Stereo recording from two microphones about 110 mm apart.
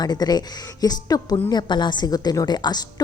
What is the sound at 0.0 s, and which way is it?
Speech, 35° left (ahead or behind).